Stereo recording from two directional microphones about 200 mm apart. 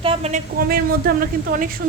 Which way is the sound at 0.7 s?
45° right (ahead or behind).